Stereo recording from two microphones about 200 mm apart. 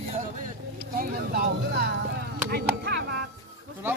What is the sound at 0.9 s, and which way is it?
Speech, 45° right (ahead or behind).